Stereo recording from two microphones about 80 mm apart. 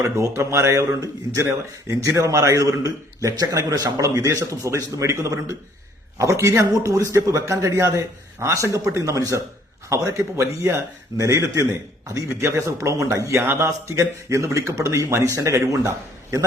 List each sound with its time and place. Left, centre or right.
0.2 s a man's voice: right
13.7 s a man's voice: right